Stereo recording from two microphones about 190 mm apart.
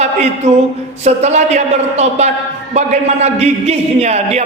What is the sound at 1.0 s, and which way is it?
A man's voice, 35° right (ahead or behind).